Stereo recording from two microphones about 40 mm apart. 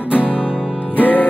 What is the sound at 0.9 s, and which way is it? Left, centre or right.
Music, left.